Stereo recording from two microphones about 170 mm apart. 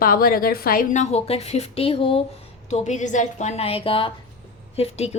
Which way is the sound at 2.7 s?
45° left (ahead or behind).